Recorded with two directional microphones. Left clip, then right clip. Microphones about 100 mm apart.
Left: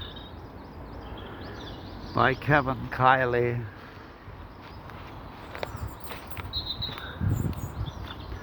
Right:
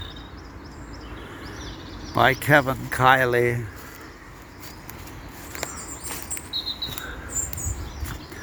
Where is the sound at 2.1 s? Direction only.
25° right (ahead or behind).